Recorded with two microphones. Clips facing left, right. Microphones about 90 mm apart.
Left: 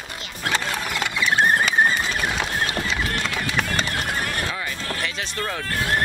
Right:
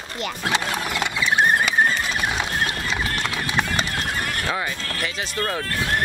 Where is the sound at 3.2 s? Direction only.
15° right (ahead or behind).